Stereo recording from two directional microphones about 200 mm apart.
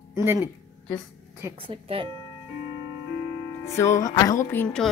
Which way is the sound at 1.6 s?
30° right (ahead or behind).